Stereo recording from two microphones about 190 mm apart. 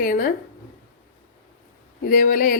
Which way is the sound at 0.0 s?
45° left (ahead or behind).